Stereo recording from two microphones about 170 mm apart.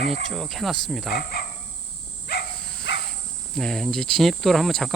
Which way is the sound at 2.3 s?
70° left (ahead or behind).